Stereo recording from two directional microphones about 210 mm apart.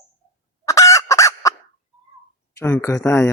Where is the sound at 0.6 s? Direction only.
15° left (ahead or behind).